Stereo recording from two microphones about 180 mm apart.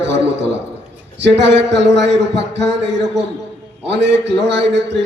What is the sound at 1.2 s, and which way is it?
A man's voice, 75° right (ahead or behind).